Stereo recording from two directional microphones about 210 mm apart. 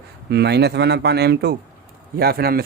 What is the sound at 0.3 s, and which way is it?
A man's voice, 50° right (ahead or behind).